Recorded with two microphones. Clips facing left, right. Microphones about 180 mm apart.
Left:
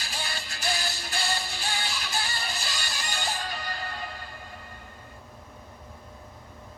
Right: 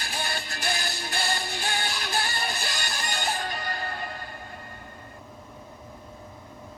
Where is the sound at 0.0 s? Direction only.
60° right (ahead or behind).